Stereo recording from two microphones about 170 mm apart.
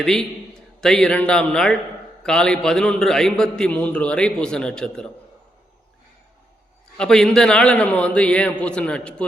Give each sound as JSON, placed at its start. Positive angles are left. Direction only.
{"t": 0.0, "sound": "a man's voice", "side_deg": 0}
{"t": 6.9, "sound": "a man's voice", "side_deg": 5}